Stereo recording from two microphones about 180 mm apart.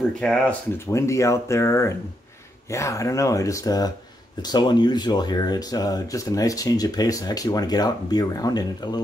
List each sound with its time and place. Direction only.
0.2 s speech: 5° left (ahead or behind)
0.7 s speech: 15° left (ahead or behind)